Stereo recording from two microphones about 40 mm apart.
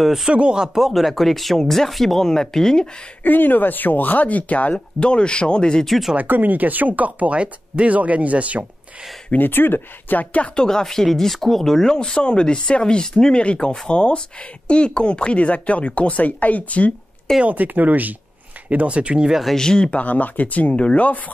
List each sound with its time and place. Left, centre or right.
0.0 s speech: centre
0.3 s speech: right
0.7 s speech: centre
3.3 s speech: left
4.7 s speech: left
5.9 s speech: centre
6.1 s speech: right
9.4 s speech: left
10.4 s speech: left
17.5 s speech: right
18.7 s speech: right
19.5 s speech: centre
19.9 s speech: left
20.7 s speech: left